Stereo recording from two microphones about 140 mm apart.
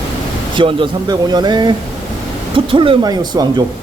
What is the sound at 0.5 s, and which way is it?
Speech, 35° right (ahead or behind).